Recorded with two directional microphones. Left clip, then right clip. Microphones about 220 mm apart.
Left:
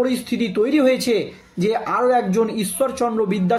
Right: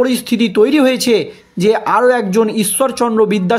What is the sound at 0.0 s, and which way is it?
Speech, 45° right (ahead or behind).